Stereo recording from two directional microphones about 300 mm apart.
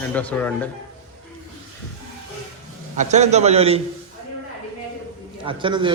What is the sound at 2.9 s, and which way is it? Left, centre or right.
Speech, right.